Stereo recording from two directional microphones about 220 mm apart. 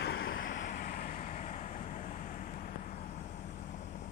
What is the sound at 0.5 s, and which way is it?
Vehicle, 40° left (ahead or behind).